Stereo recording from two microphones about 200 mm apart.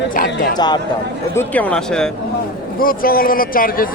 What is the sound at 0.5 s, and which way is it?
Speech, 20° left (ahead or behind).